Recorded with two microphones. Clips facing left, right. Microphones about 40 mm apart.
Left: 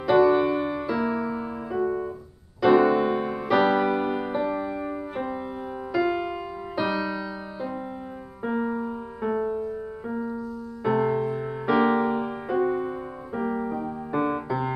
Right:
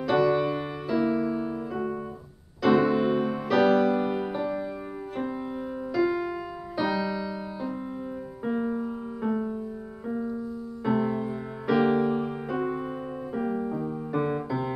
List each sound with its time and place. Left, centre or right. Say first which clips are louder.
0.0 s music: left 4 dB; centre
8.6 s music: left 1 dB; centre